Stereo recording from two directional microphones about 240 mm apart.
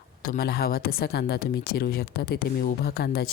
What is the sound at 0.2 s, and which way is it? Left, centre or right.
A woman's voice, left.